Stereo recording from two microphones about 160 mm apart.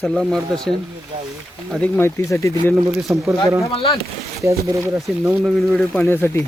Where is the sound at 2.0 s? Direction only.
15° left (ahead or behind).